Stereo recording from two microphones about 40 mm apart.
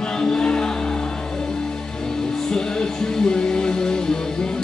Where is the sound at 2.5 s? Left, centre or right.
Centre.